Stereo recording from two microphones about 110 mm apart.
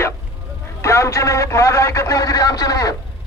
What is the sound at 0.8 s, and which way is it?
Speech, 25° left (ahead or behind).